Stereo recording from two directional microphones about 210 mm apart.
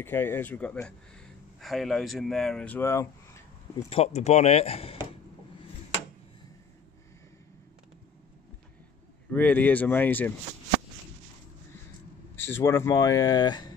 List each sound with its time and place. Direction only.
0.0 s a man's voice: 10° left (ahead or behind)
3.9 s speech: 30° left (ahead or behind)
9.3 s speech: 10° left (ahead or behind)
12.4 s speech: 10° left (ahead or behind)